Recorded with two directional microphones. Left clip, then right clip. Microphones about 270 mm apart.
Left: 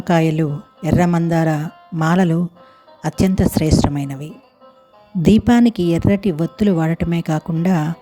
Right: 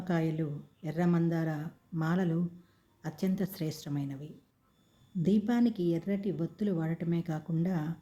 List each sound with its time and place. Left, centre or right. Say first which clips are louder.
0.0 s a woman's voice: left 16 dB; left